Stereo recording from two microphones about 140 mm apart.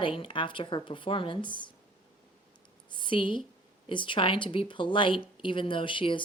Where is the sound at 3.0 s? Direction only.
35° left (ahead or behind).